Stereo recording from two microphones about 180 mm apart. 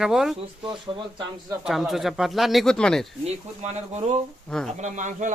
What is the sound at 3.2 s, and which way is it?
Speech, 35° right (ahead or behind).